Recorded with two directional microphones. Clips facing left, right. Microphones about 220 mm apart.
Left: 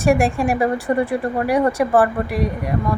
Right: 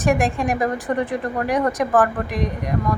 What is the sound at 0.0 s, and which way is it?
Speech, 10° left (ahead or behind).